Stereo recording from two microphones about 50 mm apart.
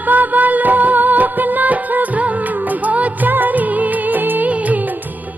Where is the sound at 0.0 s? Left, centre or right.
Right.